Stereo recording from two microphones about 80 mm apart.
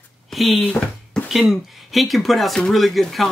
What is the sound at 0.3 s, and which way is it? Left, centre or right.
Speech, centre.